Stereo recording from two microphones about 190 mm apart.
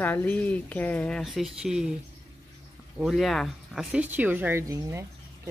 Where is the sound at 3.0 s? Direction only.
Centre (ahead or behind).